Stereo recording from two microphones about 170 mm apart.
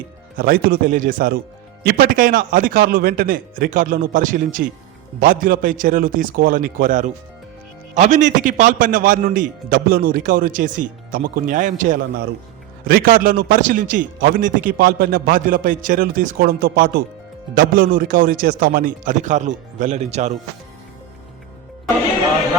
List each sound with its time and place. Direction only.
0.3 s a man's voice: 60° right (ahead or behind)
12.9 s a man's voice: 60° right (ahead or behind); by 20.3 s 40° right (ahead or behind)